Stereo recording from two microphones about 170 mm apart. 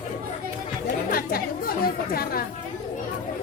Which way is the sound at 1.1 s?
60° left (ahead or behind).